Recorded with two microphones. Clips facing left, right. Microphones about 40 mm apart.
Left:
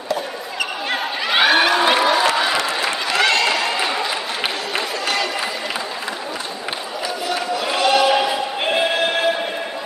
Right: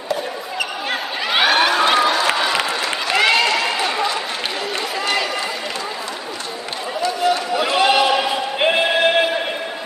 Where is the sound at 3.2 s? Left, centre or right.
Centre.